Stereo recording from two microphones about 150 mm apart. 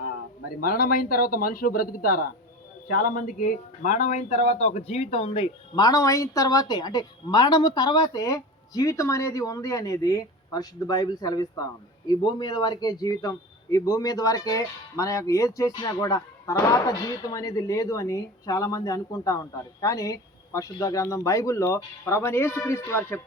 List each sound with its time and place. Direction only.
0.0 s speech: 85° left; by 23.2 s 15° left (ahead or behind)